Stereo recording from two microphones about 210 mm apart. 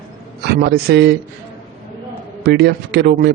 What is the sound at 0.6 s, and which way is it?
Speech, 50° right (ahead or behind).